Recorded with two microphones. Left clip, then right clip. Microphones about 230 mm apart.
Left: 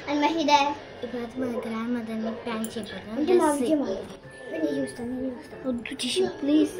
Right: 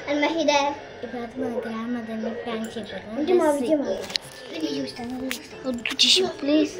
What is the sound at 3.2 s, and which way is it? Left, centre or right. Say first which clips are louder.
Child singing: right 1 dB; centre.